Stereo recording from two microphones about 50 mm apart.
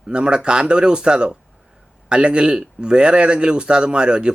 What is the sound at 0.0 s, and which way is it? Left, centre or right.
A man's voice, centre.